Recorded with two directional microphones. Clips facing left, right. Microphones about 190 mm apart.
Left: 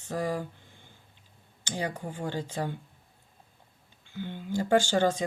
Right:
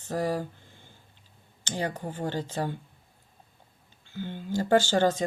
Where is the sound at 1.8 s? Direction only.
40° right (ahead or behind).